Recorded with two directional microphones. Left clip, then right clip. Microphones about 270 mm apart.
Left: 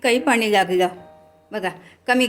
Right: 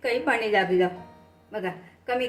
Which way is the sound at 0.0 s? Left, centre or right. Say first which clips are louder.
Left 6 dB; left.